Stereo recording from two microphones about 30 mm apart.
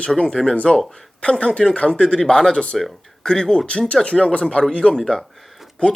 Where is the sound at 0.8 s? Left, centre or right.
Centre.